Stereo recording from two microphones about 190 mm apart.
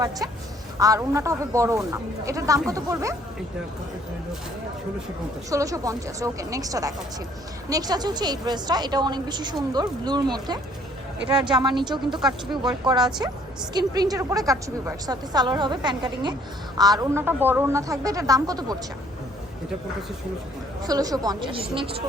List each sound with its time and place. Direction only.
0.8 s speech: 15° right (ahead or behind)
5.5 s a woman's voice: 15° right (ahead or behind)
20.8 s a woman's voice: 20° right (ahead or behind)